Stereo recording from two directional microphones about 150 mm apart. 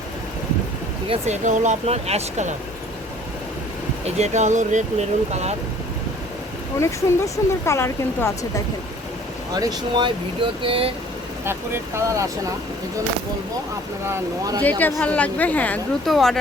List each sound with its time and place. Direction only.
1.1 s speech: 50° right (ahead or behind)
4.0 s speech: 50° right (ahead or behind)
6.7 s speech: 20° left (ahead or behind)
9.5 s speech: 25° right (ahead or behind)
11.4 s speech: 15° right (ahead or behind)
14.1 s speech: 25° right (ahead or behind)
14.6 s a woman's voice: 10° left (ahead or behind)